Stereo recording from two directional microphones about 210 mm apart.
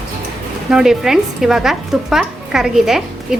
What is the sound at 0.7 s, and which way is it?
Speech, 5° right (ahead or behind).